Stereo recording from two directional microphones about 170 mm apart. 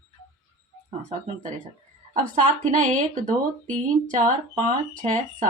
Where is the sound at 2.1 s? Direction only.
45° right (ahead or behind).